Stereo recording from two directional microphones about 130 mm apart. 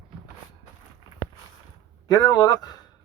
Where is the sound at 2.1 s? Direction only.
30° left (ahead or behind).